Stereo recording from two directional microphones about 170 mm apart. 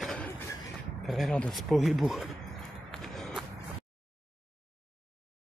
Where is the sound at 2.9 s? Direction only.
Centre (ahead or behind).